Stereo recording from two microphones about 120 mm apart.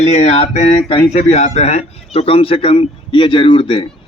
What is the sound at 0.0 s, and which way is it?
Mantra, 65° left (ahead or behind).